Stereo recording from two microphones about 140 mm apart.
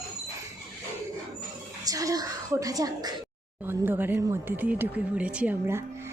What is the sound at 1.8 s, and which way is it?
A woman's voice, 25° right (ahead or behind).